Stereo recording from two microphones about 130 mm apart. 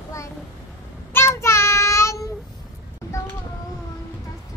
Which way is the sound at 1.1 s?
20° left (ahead or behind).